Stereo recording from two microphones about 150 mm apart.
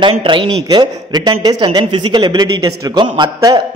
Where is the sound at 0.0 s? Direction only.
30° right (ahead or behind).